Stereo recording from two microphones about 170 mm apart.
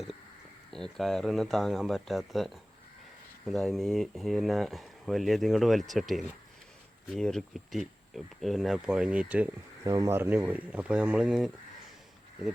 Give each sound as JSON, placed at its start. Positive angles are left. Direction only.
{"t": 0.7, "sound": "speech", "side_deg": 0}
{"t": 9.8, "sound": "speech", "side_deg": -20}